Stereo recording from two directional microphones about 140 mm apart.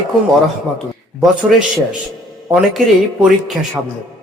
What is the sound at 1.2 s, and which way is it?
Speech, 5° right (ahead or behind).